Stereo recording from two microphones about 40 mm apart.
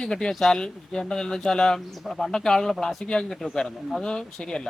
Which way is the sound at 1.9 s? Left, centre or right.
Centre.